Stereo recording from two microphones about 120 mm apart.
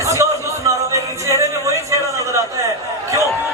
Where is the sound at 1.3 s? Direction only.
25° right (ahead or behind).